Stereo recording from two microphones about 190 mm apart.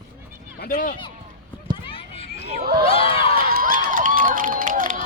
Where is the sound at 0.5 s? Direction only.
50° left (ahead or behind).